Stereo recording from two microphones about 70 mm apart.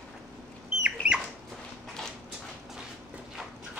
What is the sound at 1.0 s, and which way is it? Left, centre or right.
Rodents, centre.